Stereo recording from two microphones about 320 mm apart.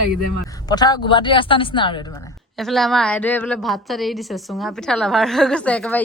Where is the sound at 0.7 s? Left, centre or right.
Centre.